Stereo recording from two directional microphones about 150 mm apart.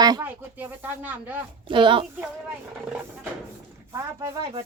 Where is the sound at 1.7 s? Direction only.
35° right (ahead or behind).